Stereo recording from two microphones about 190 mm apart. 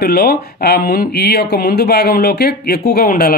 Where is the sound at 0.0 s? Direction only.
55° left (ahead or behind).